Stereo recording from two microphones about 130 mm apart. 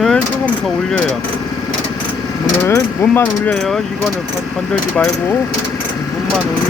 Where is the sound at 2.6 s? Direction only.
20° left (ahead or behind).